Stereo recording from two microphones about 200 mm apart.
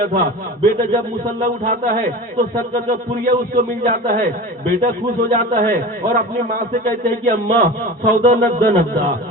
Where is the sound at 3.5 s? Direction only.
45° right (ahead or behind).